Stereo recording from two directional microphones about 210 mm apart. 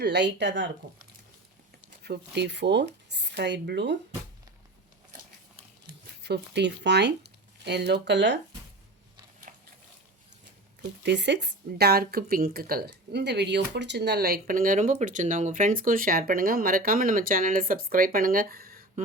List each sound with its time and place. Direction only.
0.0 s speech: 55° right (ahead or behind)
2.0 s speech: 55° right (ahead or behind)
6.2 s speech: 55° right (ahead or behind)
9.5 s a sound: 40° right (ahead or behind)
11.0 s speech: 55° right (ahead or behind)